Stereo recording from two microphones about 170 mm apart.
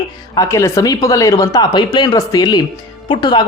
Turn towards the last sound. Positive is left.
turn(degrees=25)  # may be behind; listen again after turning